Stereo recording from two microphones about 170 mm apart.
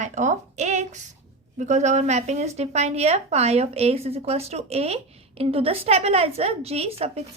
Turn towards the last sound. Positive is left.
turn(degrees=-35)  # may be behind; listen again after turning